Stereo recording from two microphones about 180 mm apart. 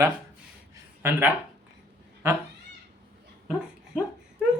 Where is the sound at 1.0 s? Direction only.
10° right (ahead or behind).